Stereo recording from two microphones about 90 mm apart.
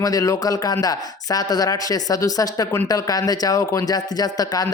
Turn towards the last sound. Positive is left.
turn(degrees=45)  # may be behind; listen again after turning